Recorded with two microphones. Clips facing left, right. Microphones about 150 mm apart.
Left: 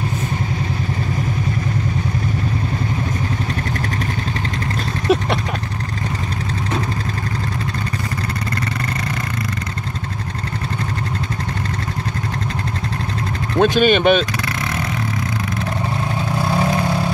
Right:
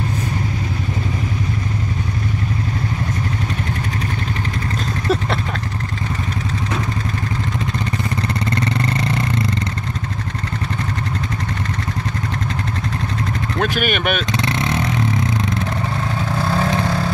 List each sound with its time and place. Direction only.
5.0 s a sound: 15° left (ahead or behind)
13.6 s speech: 25° left (ahead or behind)
16.4 s vehicle: 15° left (ahead or behind)